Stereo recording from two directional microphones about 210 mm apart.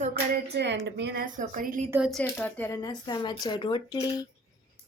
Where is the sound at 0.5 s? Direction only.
55° right (ahead or behind).